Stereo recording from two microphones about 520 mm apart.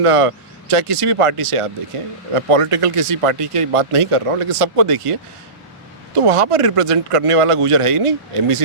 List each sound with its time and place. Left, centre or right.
0.0 s speech: right
6.2 s speech: right